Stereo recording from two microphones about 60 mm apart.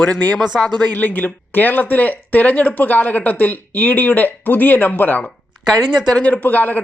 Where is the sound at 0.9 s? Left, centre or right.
Left.